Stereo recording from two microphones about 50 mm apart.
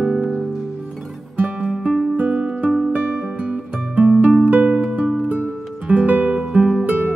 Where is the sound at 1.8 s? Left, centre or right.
Centre.